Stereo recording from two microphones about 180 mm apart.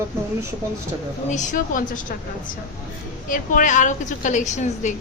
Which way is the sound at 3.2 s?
50° left (ahead or behind).